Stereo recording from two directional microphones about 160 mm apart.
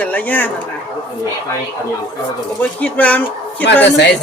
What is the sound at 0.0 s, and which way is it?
Speech, 10° left (ahead or behind).